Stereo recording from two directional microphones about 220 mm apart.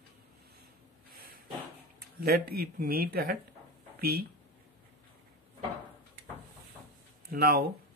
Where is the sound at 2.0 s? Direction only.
40° right (ahead or behind).